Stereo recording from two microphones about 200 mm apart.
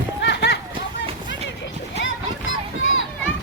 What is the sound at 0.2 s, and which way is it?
Run, 55° left (ahead or behind).